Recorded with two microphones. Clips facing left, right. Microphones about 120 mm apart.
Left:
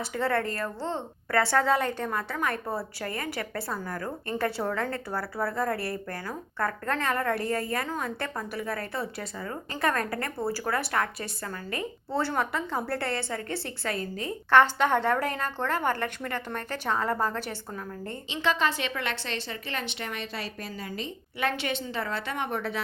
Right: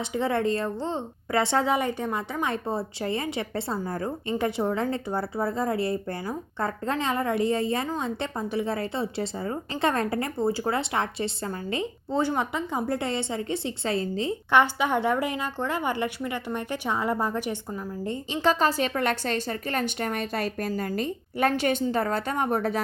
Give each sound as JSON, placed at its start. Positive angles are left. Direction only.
{"t": 0.0, "sound": "a woman's voice", "side_deg": -15}
{"t": 14.5, "sound": "a woman's voice", "side_deg": -15}
{"t": 18.4, "sound": "a woman's voice", "side_deg": -40}